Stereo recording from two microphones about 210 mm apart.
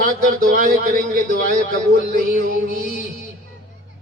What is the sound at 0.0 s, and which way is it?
A man's voice, 40° right (ahead or behind).